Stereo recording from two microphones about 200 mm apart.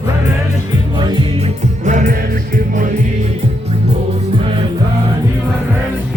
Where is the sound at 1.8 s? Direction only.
40° right (ahead or behind).